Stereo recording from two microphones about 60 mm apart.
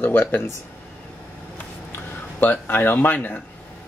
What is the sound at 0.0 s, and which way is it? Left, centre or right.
Speech, left.